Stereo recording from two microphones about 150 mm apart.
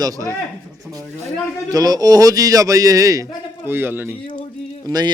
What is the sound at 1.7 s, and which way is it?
Speech, 25° right (ahead or behind).